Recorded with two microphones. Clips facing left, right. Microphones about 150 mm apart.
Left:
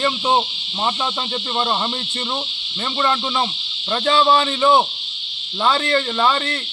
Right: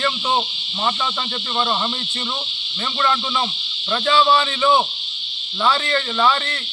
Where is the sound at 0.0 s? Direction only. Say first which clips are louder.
Left 3 dB; 20° left (ahead or behind).